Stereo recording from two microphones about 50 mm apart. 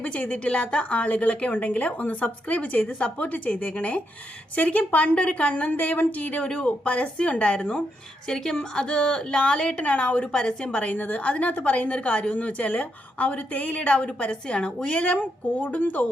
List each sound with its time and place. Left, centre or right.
0.0 s a woman's voice: left